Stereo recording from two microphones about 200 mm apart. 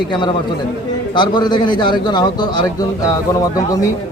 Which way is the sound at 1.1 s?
20° left (ahead or behind).